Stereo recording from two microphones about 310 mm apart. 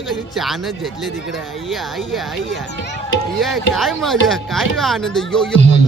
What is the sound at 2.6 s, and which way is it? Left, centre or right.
Speech, left.